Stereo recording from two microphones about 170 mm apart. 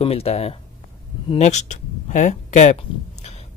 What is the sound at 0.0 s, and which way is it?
Speech, 35° left (ahead or behind).